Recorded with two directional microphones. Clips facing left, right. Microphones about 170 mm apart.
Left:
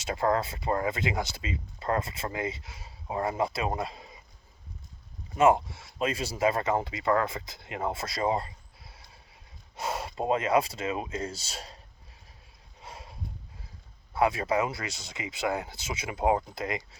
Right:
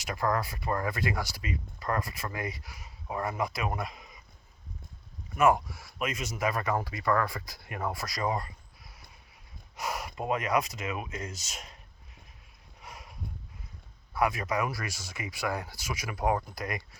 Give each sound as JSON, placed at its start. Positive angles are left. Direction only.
{"t": 0.0, "sound": "speech", "side_deg": 25}
{"t": 5.3, "sound": "speech", "side_deg": 25}
{"t": 12.8, "sound": "a sound", "side_deg": 25}
{"t": 14.1, "sound": "speech", "side_deg": 25}